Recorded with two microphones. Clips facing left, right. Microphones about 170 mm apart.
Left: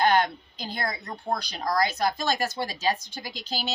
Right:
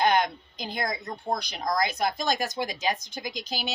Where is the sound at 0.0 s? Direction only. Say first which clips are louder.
Left 1 dB; 15° right (ahead or behind).